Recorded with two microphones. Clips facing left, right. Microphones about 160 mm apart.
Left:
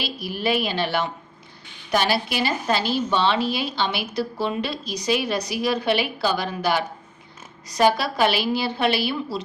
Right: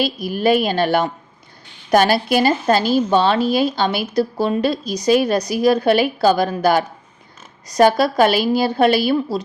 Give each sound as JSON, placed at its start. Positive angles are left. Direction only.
{"t": 0.0, "sound": "a woman's voice", "side_deg": -45}